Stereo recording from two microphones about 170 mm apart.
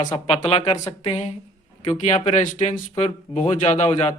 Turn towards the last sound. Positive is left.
turn(degrees=40)  # may be behind; listen again after turning